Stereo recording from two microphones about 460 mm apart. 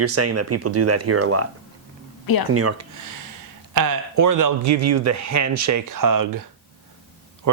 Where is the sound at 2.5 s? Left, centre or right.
Right.